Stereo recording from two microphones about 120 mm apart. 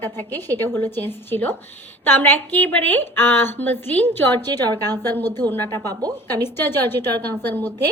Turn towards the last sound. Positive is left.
turn(degrees=15)  # may be behind; listen again after turning